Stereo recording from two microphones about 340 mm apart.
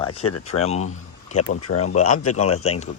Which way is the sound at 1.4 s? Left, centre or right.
Left.